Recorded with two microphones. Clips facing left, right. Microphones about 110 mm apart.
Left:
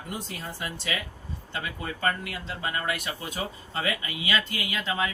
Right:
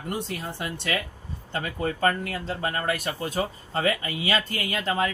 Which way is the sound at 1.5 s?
45° right (ahead or behind).